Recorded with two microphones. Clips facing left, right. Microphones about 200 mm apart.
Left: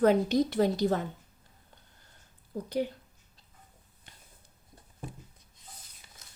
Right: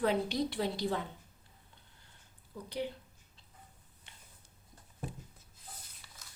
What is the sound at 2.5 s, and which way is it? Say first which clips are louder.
Speech: left 7 dB; 45° left (ahead or behind).